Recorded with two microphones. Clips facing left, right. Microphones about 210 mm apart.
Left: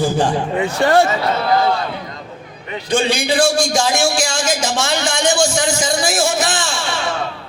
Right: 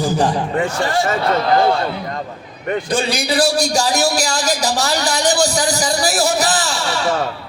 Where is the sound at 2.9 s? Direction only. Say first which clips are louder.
Left 5 dB; 35° right (ahead or behind).